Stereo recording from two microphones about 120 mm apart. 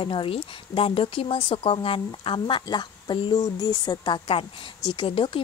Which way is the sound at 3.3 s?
30° left (ahead or behind).